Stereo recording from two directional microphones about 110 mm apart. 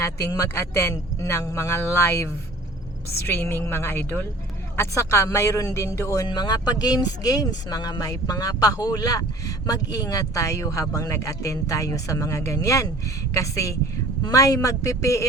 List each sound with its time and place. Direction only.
0.0 s speech: 25° left (ahead or behind)
6.2 s speech: 40° left (ahead or behind)